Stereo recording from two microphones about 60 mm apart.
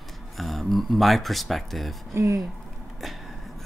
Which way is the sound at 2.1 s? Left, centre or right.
Right.